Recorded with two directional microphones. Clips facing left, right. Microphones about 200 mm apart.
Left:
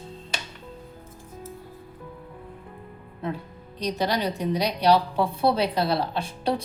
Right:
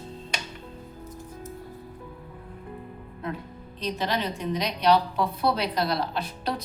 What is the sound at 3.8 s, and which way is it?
A woman's voice, 40° left (ahead or behind).